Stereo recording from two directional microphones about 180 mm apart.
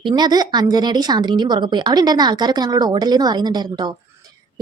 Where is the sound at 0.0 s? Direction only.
25° right (ahead or behind).